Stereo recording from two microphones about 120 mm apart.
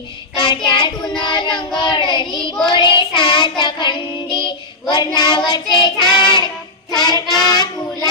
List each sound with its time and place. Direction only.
0.3 s child singing: 40° left (ahead or behind)